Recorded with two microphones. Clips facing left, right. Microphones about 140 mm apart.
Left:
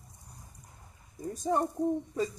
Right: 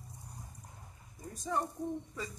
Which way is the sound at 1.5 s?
30° left (ahead or behind).